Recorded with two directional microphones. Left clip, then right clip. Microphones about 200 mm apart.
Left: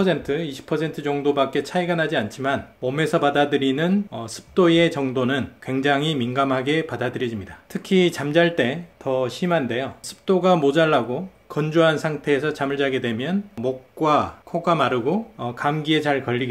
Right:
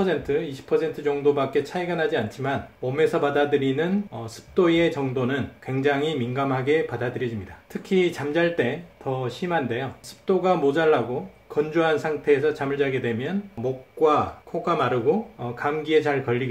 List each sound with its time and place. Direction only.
0.0 s speech: 40° left (ahead or behind)